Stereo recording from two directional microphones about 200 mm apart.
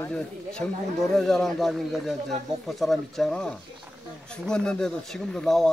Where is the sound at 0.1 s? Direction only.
5° left (ahead or behind).